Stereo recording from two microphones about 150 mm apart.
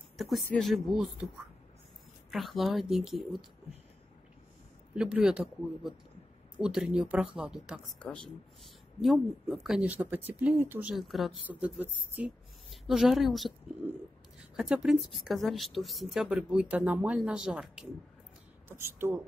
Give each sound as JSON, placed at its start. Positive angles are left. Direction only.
{"t": 0.5, "sound": "a woman's voice", "side_deg": 0}
{"t": 2.3, "sound": "a woman's voice", "side_deg": 0}
{"t": 4.9, "sound": "a woman's voice", "side_deg": -5}
{"t": 8.0, "sound": "a woman's voice", "side_deg": 5}
{"t": 14.6, "sound": "a woman's voice", "side_deg": -5}
{"t": 18.7, "sound": "speech", "side_deg": -15}